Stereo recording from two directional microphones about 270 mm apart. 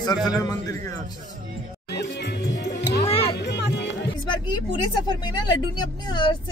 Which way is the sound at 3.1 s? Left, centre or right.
Left.